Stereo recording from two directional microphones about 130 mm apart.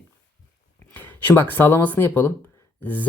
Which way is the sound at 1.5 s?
15° left (ahead or behind).